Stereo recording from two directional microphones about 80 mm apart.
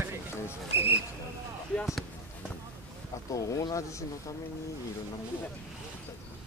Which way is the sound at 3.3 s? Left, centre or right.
Left.